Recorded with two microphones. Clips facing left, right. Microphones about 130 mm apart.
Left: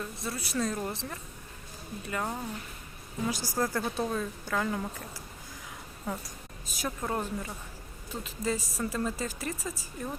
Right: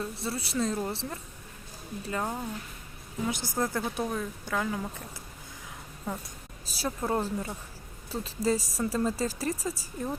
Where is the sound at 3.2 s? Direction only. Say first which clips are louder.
Even; 20° right (ahead or behind).